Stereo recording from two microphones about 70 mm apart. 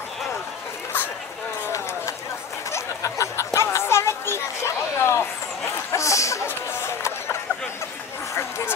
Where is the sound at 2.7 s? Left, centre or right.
Left.